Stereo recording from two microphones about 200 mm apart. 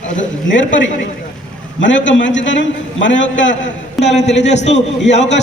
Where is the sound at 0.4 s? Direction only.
65° left (ahead or behind).